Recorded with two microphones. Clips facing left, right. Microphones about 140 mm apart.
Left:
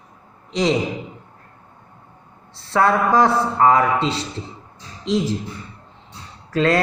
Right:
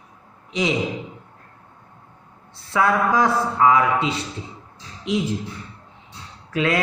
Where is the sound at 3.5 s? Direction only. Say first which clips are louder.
Left 1 dB; 45° left (ahead or behind).